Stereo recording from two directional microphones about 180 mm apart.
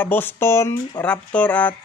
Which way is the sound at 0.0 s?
10° left (ahead or behind).